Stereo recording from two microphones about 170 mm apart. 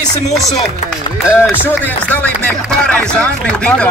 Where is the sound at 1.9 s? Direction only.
10° left (ahead or behind).